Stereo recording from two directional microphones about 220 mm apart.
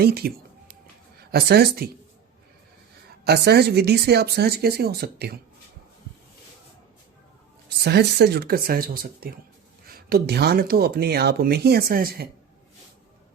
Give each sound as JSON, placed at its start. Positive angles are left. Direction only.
{"t": 0.0, "sound": "music", "side_deg": -45}
{"t": 1.3, "sound": "speech", "side_deg": -45}
{"t": 3.2, "sound": "speech", "side_deg": -45}
{"t": 7.9, "sound": "speech", "side_deg": -50}